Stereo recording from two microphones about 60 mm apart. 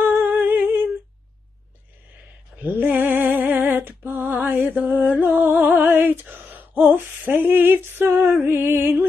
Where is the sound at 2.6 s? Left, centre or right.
Right.